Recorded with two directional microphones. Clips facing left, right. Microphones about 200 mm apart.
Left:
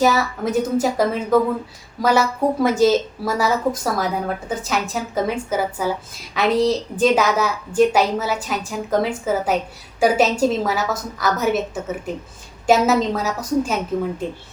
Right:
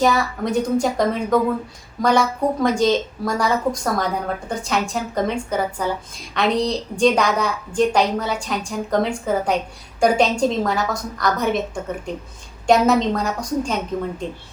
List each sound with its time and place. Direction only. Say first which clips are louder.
0.0 s a woman's voice: left 1 dB; 5° left (ahead or behind)